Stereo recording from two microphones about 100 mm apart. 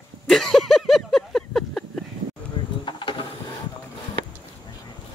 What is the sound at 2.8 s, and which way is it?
Vehicle, 55° left (ahead or behind).